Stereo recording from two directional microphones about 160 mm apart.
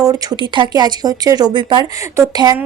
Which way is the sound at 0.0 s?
25° right (ahead or behind).